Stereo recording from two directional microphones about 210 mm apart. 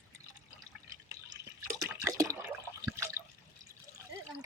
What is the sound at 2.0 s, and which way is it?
Toilet flush, 15° right (ahead or behind).